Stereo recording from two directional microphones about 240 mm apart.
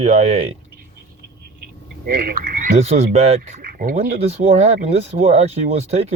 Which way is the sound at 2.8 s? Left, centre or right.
Right.